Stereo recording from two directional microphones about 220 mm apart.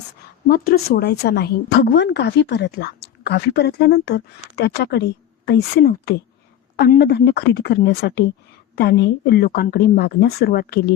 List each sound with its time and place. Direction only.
0.4 s a woman's voice: 40° left (ahead or behind)